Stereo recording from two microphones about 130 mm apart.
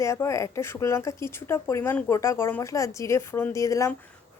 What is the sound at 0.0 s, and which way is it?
A woman's voice, 20° left (ahead or behind).